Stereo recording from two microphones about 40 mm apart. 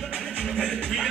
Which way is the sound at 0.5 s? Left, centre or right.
Centre.